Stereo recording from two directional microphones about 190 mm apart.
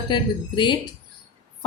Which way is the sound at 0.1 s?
25° left (ahead or behind).